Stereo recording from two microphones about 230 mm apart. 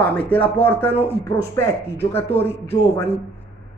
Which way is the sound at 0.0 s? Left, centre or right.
Centre.